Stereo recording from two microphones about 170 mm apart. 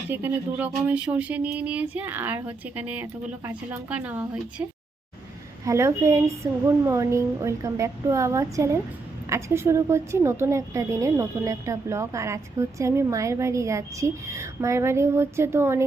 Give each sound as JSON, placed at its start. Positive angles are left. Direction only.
{"t": 0.1, "sound": "a woman's voice", "side_deg": -10}
{"t": 5.6, "sound": "a woman's voice", "side_deg": -15}